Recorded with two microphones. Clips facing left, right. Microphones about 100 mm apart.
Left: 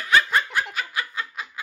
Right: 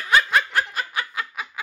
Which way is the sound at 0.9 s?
20° right (ahead or behind).